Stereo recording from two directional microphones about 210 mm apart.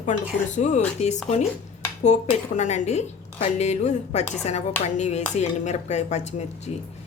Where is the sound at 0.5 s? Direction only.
35° left (ahead or behind).